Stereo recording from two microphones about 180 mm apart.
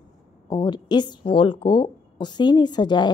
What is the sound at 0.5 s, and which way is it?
A woman's voice, 25° left (ahead or behind).